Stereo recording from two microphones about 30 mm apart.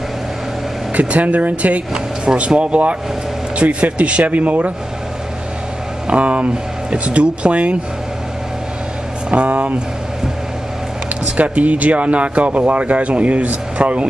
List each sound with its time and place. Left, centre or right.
0.9 s speech: right
2.2 s speech: right
3.6 s speech: right
6.1 s speech: right
9.3 s speech: right
11.3 s speech: right